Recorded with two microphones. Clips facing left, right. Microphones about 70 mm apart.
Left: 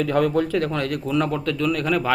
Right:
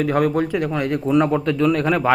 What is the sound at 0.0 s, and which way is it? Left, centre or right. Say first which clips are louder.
A man's voice: right 1 dB; right.